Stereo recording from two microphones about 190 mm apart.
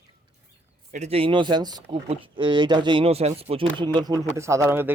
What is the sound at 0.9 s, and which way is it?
Speech, 35° right (ahead or behind).